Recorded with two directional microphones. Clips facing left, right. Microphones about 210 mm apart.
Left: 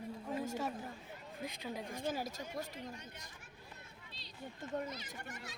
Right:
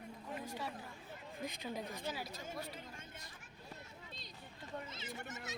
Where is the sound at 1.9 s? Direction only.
50° left (ahead or behind).